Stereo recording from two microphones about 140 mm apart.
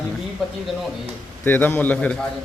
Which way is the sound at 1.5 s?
15° left (ahead or behind).